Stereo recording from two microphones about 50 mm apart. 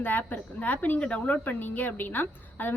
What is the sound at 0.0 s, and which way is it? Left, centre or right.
A woman's voice, left.